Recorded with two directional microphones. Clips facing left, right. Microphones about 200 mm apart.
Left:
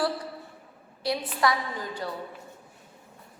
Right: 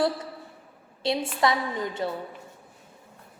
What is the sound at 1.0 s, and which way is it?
A woman's voice, 25° right (ahead or behind).